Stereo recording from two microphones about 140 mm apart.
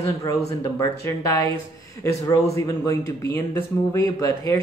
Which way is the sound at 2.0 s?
25° left (ahead or behind).